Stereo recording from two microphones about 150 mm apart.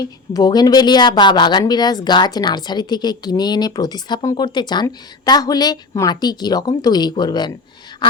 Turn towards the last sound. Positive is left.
turn(degrees=30)  # may be behind; listen again after turning